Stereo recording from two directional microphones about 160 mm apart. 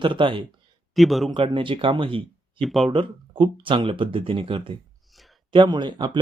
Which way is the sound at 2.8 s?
35° right (ahead or behind).